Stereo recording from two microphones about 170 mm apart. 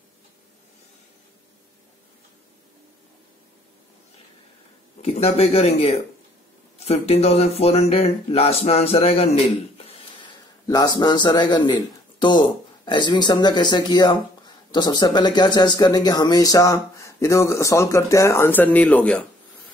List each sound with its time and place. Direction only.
5.0 s speech: 35° left (ahead or behind)
10.7 s a man's voice: 20° left (ahead or behind)